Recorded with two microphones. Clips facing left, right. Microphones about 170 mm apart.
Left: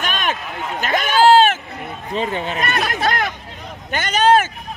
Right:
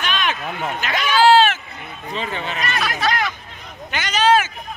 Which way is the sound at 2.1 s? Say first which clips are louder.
Left 4 dB; 45° left (ahead or behind).